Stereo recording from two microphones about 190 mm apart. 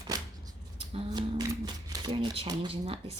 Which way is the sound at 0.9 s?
20° right (ahead or behind).